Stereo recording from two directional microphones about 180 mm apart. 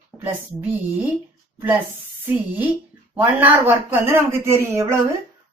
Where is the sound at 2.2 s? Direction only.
10° right (ahead or behind).